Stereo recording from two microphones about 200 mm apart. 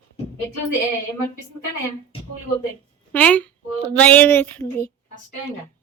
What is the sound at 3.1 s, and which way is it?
A woman's voice, 5° left (ahead or behind).